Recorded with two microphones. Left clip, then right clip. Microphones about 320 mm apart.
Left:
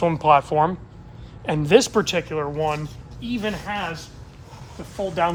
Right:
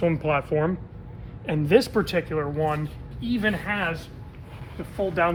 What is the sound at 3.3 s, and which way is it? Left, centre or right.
Speech, centre.